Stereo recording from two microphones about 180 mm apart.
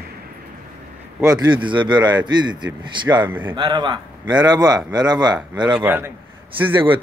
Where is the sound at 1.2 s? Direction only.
20° right (ahead or behind).